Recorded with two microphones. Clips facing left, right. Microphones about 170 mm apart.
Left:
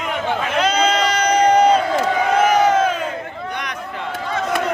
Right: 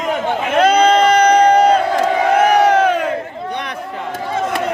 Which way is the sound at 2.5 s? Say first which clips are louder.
Right 3 dB; 70° right (ahead or behind).